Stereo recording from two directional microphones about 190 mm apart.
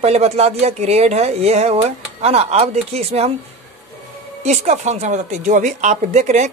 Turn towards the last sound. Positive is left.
turn(degrees=-35)  # may be behind; listen again after turning